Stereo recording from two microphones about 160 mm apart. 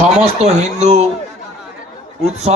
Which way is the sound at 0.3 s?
45° right (ahead or behind).